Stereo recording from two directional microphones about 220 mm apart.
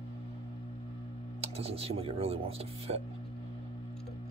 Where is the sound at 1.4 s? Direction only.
25° right (ahead or behind).